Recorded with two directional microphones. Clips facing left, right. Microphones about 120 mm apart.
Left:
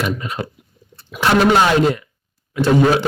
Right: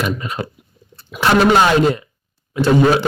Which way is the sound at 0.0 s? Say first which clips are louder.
Right 1 dB; 30° right (ahead or behind).